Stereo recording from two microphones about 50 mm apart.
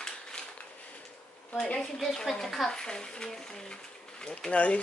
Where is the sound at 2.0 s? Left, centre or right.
Centre.